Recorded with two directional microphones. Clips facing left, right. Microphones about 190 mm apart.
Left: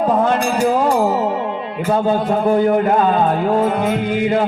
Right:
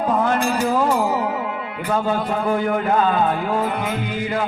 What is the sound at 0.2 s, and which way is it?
Music, 35° left (ahead or behind).